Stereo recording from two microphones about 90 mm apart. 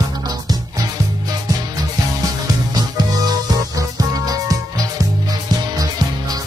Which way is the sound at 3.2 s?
45° right (ahead or behind).